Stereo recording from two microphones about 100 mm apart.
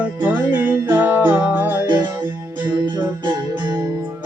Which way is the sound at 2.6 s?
50° right (ahead or behind).